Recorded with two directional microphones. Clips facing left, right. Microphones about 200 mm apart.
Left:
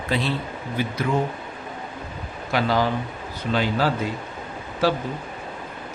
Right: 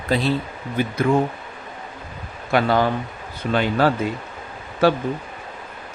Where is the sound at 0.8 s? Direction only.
50° right (ahead or behind).